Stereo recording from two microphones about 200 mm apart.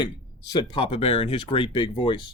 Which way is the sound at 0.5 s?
25° left (ahead or behind).